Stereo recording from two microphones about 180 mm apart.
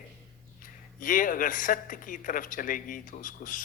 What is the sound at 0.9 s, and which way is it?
Speech, 50° left (ahead or behind).